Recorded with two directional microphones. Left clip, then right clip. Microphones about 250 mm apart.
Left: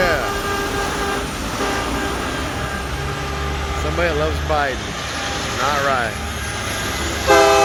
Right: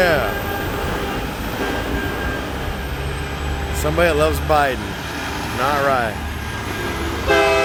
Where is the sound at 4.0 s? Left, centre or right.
Right.